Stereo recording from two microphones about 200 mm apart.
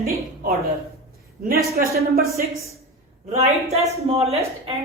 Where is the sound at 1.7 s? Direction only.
50° right (ahead or behind).